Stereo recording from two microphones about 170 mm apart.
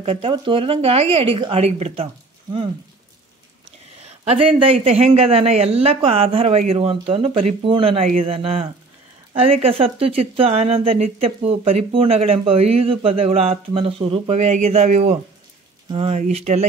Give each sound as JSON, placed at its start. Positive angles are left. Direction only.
{"t": 0.0, "sound": "speech", "side_deg": -35}
{"t": 4.2, "sound": "speech", "side_deg": -35}